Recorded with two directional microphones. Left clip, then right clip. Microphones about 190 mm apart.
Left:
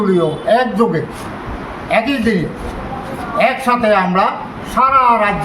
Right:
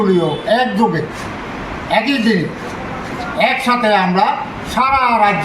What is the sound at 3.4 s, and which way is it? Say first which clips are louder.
Speech: left 1 dB; centre (ahead or behind).